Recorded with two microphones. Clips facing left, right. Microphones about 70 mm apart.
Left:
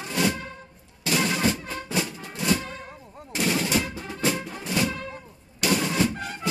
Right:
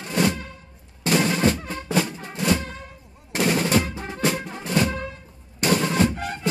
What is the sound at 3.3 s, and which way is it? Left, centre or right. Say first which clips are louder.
Music: right 4 dB; right.